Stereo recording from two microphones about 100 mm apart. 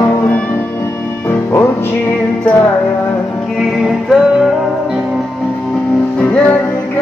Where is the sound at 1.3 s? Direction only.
25° left (ahead or behind).